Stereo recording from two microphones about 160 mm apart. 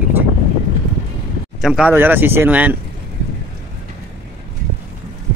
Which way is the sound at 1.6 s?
5° right (ahead or behind).